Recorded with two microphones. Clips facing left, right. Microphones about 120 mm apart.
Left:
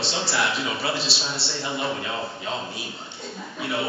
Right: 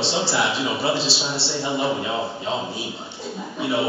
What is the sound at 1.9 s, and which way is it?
Speech, 15° right (ahead or behind).